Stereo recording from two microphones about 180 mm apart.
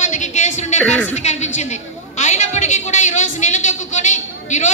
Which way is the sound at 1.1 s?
40° left (ahead or behind).